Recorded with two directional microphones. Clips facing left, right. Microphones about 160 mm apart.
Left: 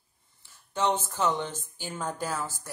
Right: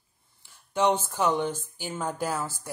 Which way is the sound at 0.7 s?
10° right (ahead or behind).